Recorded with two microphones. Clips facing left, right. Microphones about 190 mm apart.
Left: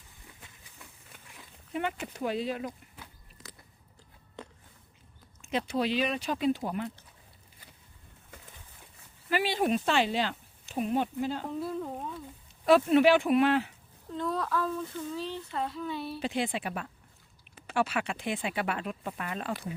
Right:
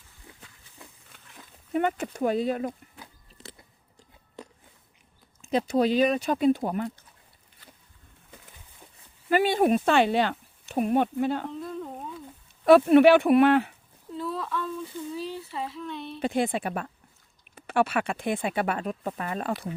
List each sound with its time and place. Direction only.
1.7 s speech: 45° right (ahead or behind)
3.0 s biting: 30° right (ahead or behind)
5.4 s speech: 35° right (ahead or behind)
9.3 s speech: 50° right (ahead or behind)
11.6 s a sound: 5° left (ahead or behind)
12.6 s speech: 60° right (ahead or behind)
14.1 s speech: 5° right (ahead or behind)
15.1 s speech: 10° right (ahead or behind); by 16.2 s 5° left (ahead or behind)
16.2 s speech: 50° right (ahead or behind)